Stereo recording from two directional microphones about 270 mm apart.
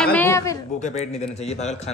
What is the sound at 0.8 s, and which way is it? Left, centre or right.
Speech, left.